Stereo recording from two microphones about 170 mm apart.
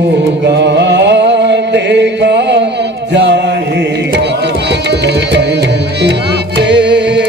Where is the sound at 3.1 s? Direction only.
90° right.